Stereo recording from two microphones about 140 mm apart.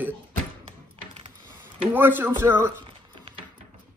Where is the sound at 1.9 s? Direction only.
15° right (ahead or behind).